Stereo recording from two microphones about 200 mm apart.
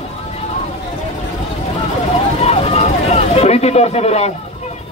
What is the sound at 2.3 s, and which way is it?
Vehicle, 30° left (ahead or behind).